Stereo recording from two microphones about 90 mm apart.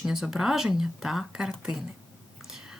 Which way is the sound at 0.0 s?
5° right (ahead or behind).